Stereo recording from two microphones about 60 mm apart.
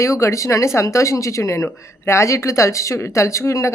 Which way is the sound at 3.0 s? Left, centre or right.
Left.